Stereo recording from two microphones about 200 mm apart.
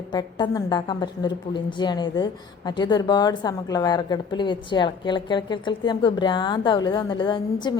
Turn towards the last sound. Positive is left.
turn(degrees=25)  # may be behind; listen again after turning